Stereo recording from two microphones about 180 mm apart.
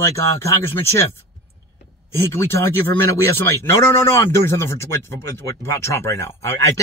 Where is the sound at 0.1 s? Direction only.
15° left (ahead or behind).